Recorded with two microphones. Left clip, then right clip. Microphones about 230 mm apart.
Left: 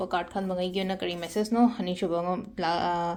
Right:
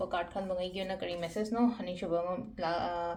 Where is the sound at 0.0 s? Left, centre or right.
Left.